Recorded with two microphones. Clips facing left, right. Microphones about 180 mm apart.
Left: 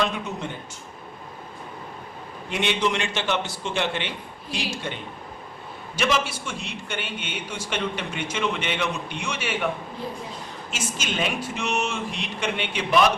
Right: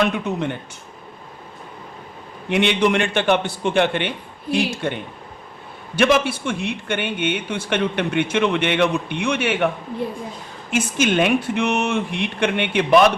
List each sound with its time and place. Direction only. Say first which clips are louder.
0.0 s a man's voice: right 6 dB; 60° right (ahead or behind)
2.5 s a man's voice: right 7 dB; 60° right (ahead or behind)
6.0 s a man's voice: right 8 dB; 60° right (ahead or behind)
10.7 s a man's voice: right 12 dB; 60° right (ahead or behind)